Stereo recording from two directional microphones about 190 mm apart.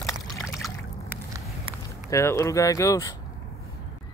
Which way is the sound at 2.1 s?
15° left (ahead or behind).